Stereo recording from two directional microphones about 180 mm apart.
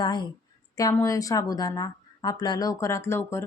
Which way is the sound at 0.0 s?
25° left (ahead or behind).